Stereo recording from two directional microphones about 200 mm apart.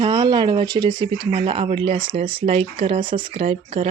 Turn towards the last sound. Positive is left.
turn(degrees=-30)  # may be behind; listen again after turning